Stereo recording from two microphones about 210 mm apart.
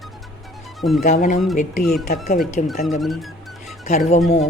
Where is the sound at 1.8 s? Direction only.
Centre (ahead or behind).